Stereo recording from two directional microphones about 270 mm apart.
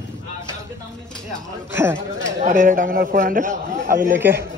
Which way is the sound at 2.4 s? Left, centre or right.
Right.